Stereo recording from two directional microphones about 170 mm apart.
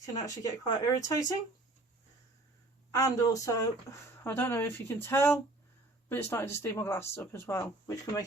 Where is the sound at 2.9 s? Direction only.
20° left (ahead or behind).